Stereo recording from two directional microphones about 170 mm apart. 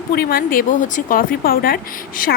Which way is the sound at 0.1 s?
65° left (ahead or behind).